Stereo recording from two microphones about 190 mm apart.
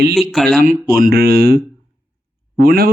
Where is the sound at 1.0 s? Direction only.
55° right (ahead or behind).